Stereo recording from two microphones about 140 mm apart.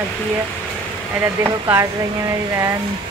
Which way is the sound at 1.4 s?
15° right (ahead or behind).